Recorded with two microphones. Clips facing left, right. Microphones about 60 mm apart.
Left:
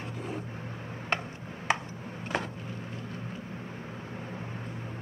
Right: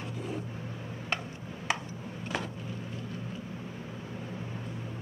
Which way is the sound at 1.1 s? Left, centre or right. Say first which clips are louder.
Left 3 dB; left.